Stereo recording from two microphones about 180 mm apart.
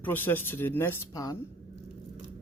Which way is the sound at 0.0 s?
10° left (ahead or behind).